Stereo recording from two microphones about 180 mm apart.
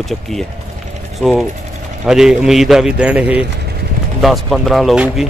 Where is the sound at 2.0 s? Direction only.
5° right (ahead or behind).